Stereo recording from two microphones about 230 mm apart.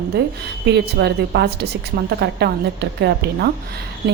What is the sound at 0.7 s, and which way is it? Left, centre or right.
A woman's voice, right.